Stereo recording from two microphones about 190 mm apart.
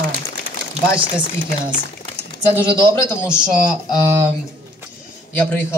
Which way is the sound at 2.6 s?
25° right (ahead or behind).